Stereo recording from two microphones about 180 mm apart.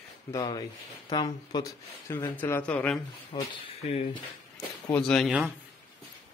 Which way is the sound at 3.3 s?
25° left (ahead or behind).